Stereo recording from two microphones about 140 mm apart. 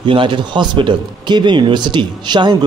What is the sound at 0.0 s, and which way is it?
Speech, 35° right (ahead or behind).